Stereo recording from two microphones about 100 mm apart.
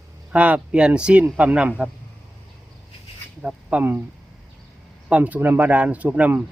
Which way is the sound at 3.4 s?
15° right (ahead or behind).